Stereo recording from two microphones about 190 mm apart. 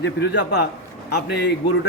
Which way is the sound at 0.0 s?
65° left (ahead or behind).